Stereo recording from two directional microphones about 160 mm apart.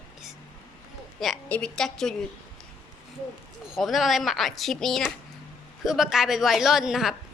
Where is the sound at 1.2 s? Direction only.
5° left (ahead or behind).